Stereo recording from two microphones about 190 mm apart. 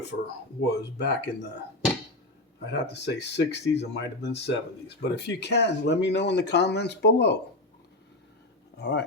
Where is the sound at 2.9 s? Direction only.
65° left (ahead or behind).